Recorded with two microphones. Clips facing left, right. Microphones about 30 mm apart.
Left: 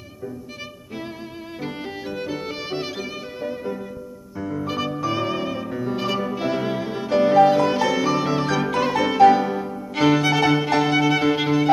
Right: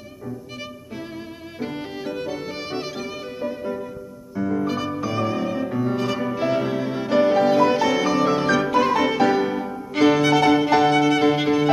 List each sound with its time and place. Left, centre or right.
1.6 s violin: centre
4.6 s music: centre
5.6 s music: centre